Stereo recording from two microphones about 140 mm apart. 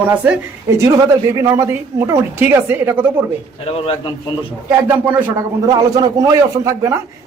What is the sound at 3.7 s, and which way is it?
Speech, 40° left (ahead or behind).